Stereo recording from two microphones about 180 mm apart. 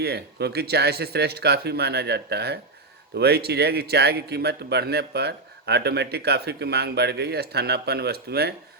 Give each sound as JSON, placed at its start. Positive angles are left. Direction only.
{"t": 0.0, "sound": "a man's voice", "side_deg": -65}